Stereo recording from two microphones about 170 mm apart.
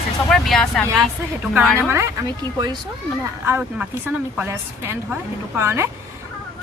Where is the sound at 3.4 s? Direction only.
10° right (ahead or behind).